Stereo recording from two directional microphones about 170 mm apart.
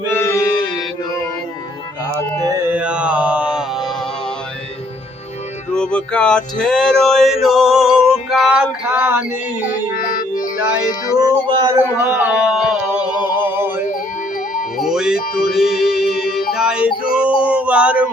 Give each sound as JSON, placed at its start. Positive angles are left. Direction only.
{"t": 0.1, "sound": "mantra", "side_deg": 15}
{"t": 2.4, "sound": "music", "side_deg": -20}
{"t": 5.7, "sound": "a sound", "side_deg": 5}
{"t": 9.9, "sound": "music", "side_deg": 50}
{"t": 11.2, "sound": "speech", "side_deg": -25}
{"t": 11.7, "sound": "a sound", "side_deg": -10}
{"t": 13.4, "sound": "music", "side_deg": -10}
{"t": 14.8, "sound": "music", "side_deg": -5}
{"t": 17.4, "sound": "a sound", "side_deg": -10}